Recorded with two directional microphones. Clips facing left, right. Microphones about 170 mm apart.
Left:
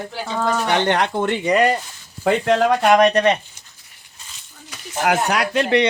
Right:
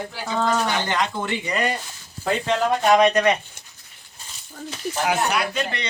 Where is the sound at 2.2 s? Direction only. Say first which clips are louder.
Left 5 dB; 80° left.